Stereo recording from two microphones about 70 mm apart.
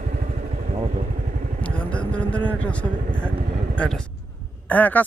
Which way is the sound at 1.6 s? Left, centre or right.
Centre.